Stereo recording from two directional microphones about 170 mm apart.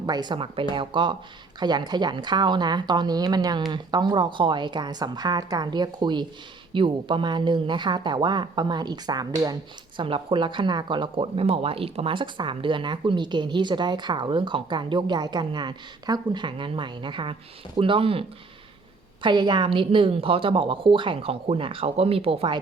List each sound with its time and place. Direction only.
0.0 s a woman's voice: 25° right (ahead or behind)